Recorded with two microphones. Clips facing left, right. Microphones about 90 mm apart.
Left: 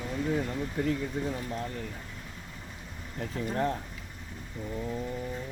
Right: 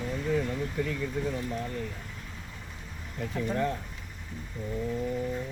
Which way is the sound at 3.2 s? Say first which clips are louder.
Right 1 dB; 40° left (ahead or behind).